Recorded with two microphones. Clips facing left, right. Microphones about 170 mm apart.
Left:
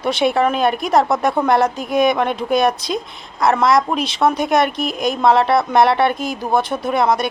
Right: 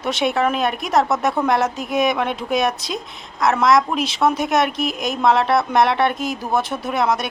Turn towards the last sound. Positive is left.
turn(degrees=0)  # may be behind; listen again after turning